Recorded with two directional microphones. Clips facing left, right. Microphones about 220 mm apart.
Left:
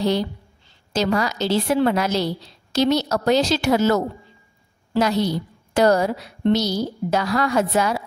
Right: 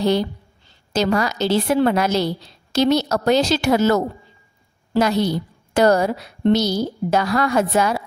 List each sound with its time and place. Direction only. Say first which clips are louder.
0.9 s a woman's voice: right 2 dB; 55° right (ahead or behind)